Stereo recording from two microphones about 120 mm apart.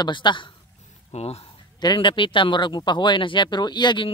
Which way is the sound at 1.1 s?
60° left (ahead or behind).